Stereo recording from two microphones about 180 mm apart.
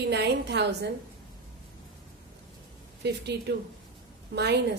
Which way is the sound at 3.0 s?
70° right (ahead or behind).